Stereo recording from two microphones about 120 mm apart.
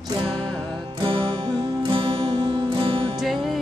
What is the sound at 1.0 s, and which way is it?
Music, 45° right (ahead or behind).